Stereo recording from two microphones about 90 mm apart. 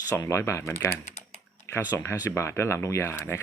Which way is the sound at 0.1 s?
30° left (ahead or behind).